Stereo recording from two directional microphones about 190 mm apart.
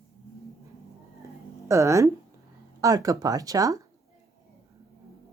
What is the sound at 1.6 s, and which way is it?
Speech, 15° right (ahead or behind).